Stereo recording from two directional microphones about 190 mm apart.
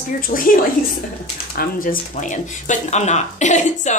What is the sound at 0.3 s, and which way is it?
Speech, 50° left (ahead or behind).